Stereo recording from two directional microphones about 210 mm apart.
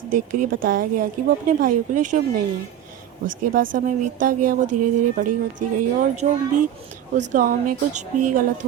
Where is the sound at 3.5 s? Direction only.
40° right (ahead or behind).